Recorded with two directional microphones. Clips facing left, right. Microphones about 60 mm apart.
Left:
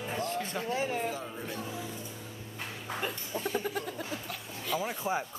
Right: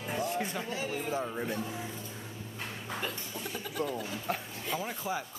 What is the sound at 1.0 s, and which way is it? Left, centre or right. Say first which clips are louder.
Speech: right 3 dB; right.